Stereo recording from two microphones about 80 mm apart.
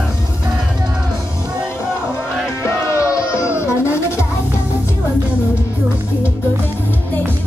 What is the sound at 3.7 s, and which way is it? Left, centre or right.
Music, left.